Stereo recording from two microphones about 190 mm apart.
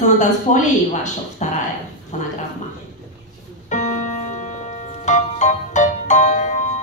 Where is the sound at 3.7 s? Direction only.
40° left (ahead or behind).